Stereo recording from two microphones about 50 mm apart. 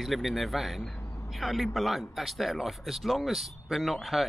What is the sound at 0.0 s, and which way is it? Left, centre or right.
Speech, centre.